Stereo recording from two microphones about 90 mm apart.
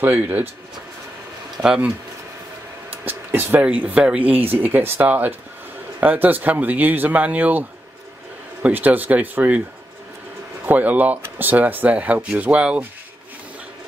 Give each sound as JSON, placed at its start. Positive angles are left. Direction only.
{"t": 0.0, "sound": "speech", "side_deg": -20}
{"t": 1.6, "sound": "speech", "side_deg": -10}
{"t": 2.9, "sound": "a sound", "side_deg": -20}
{"t": 3.6, "sound": "speech", "side_deg": -15}
{"t": 8.6, "sound": "speech", "side_deg": -20}
{"t": 10.6, "sound": "speech", "side_deg": -20}